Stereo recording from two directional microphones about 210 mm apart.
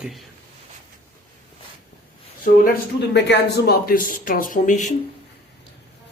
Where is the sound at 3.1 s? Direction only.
50° left (ahead or behind); by 4.9 s 35° left (ahead or behind).